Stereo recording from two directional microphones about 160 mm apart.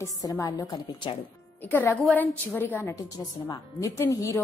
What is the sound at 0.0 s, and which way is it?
Speech, 20° left (ahead or behind).